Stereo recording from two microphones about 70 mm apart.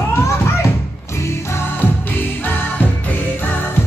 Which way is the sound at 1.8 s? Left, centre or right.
Left.